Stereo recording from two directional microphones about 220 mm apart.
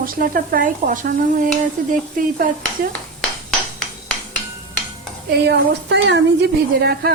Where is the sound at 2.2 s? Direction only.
40° right (ahead or behind).